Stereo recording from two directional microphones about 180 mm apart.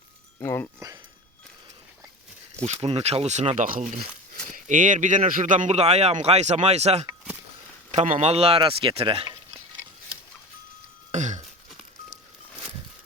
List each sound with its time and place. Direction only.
0.3 s speech: 15° left (ahead or behind)
2.6 s speech: 35° right (ahead or behind)
11.1 s a sound: 40° right (ahead or behind)